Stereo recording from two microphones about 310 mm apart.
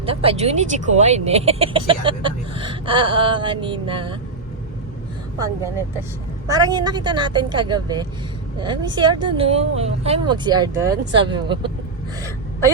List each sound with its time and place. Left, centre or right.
0.0 s speech: centre
5.4 s speech: centre